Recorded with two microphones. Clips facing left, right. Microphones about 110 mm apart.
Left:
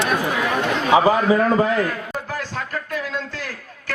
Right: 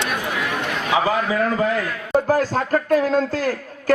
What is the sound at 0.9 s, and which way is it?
Speech, 25° left (ahead or behind).